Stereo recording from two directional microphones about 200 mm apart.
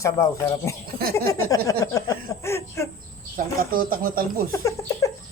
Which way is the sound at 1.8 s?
15° left (ahead or behind).